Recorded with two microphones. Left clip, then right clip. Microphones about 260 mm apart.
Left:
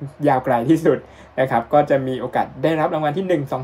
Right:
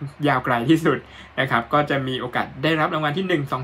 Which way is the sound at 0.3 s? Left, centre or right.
Right.